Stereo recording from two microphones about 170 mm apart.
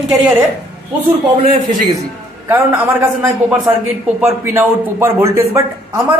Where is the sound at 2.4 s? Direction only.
10° right (ahead or behind).